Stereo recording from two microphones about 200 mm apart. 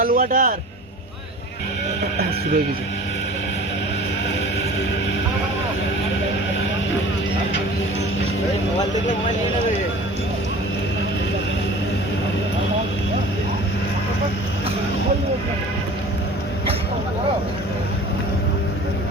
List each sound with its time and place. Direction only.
0.0 s a man's voice: 45° right (ahead or behind)